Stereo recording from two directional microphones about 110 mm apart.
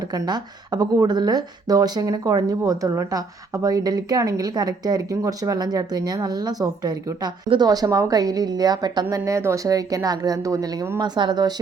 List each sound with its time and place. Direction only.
0.1 s speech: 35° right (ahead or behind)